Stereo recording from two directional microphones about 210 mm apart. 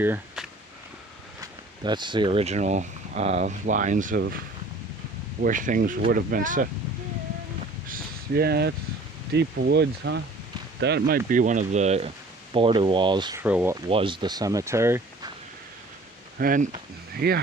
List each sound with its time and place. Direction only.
0.0 s speech: 10° right (ahead or behind)
1.4 s speech: 20° right (ahead or behind); by 4.2 s 40° right (ahead or behind)
5.4 s speech: 40° right (ahead or behind)
7.9 s a sound: 45° right (ahead or behind)
9.3 s speech: 50° right (ahead or behind)
11.3 s speech: 35° right (ahead or behind); by 13.4 s 20° right (ahead or behind)
13.4 s speech: 5° right (ahead or behind)
13.8 s speech: 25° right (ahead or behind)
16.4 s speech: 40° right (ahead or behind)